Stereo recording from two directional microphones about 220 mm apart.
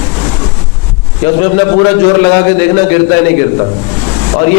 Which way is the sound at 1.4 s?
15° left (ahead or behind).